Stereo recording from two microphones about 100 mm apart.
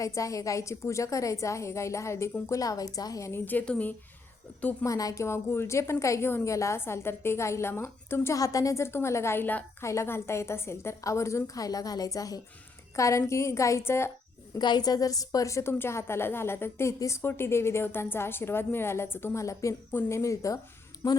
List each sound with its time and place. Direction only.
0.0 s a woman's voice: 35° left (ahead or behind)
3.4 s a woman's voice: 15° left (ahead or behind)
4.9 s a woman's voice: 35° left (ahead or behind)
14.6 s a woman's voice: 45° left (ahead or behind)
19.9 s a woman's voice: 20° left (ahead or behind)
20.1 s a woman's voice: 30° left (ahead or behind)